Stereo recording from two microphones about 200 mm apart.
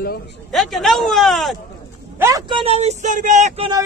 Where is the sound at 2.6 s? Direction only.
30° right (ahead or behind).